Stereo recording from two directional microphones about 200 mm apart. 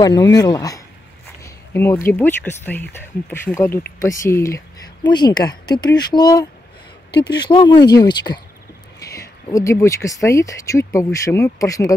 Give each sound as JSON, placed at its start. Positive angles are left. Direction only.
{"t": 0.0, "sound": "speech", "side_deg": 20}
{"t": 1.4, "sound": "a sound", "side_deg": 10}
{"t": 2.0, "sound": "speech", "side_deg": 10}